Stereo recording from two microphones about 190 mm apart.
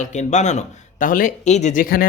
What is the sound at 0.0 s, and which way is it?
Speech, 40° left (ahead or behind).